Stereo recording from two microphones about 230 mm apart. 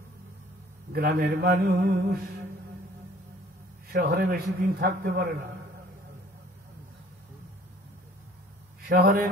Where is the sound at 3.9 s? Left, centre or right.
Right.